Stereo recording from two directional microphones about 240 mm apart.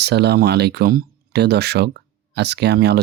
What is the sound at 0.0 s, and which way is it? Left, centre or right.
Speech, right.